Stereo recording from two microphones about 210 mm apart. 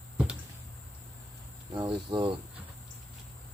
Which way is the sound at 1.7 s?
20° right (ahead or behind).